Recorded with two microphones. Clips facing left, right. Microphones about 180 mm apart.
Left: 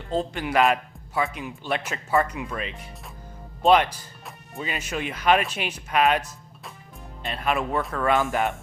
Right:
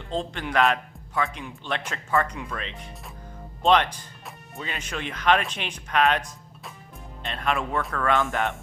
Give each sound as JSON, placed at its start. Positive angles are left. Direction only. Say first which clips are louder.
{"t": 0.1, "sound": "speech", "louder": "left 3 dB", "side_deg": 5}